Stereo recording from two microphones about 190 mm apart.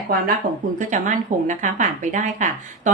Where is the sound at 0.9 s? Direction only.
40° right (ahead or behind).